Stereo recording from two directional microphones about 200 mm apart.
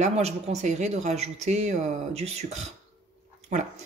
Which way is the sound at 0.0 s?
35° right (ahead or behind).